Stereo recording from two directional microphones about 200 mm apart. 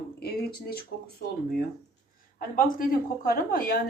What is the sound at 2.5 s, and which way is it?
Speech, 45° left (ahead or behind).